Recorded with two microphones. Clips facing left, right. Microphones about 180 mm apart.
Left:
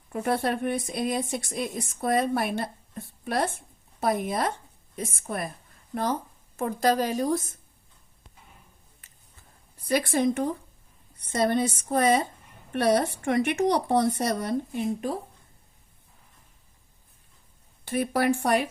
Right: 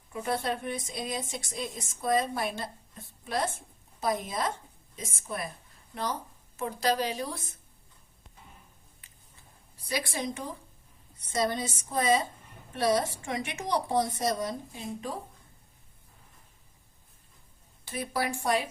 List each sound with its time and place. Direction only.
0.1 s a woman's voice: 55° left (ahead or behind)
9.8 s speech: 55° left (ahead or behind)
17.8 s speech: 60° left (ahead or behind)